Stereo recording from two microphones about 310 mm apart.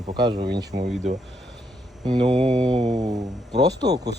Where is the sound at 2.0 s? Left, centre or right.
Centre.